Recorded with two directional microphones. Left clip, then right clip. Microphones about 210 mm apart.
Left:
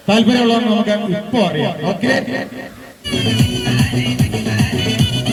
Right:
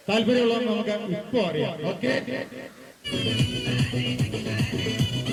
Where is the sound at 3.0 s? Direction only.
50° left (ahead or behind).